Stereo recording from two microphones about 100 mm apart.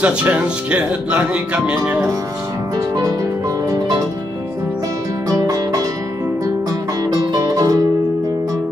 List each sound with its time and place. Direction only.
0.0 s speech: 15° right (ahead or behind)
5.3 s music: 35° right (ahead or behind)
7.1 s music: 40° right (ahead or behind)